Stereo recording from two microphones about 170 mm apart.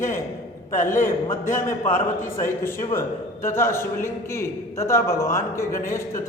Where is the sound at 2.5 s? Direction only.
15° left (ahead or behind).